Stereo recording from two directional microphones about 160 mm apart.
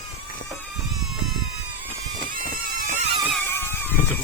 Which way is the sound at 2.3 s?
60° right (ahead or behind).